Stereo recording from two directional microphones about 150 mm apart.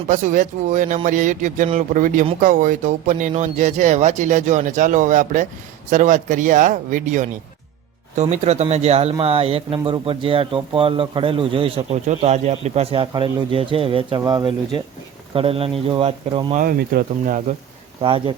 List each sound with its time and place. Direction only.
0.1 s speech: 55° right (ahead or behind); by 14.8 s 30° right (ahead or behind)
15.4 s speech: 40° right (ahead or behind)
16.6 s speech: 75° right (ahead or behind)
18.0 s speech: 35° right (ahead or behind)